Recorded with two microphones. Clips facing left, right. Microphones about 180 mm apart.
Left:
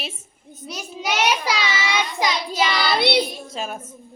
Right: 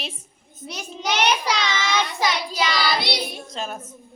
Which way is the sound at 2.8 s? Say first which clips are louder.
Left 4 dB; 60° left (ahead or behind).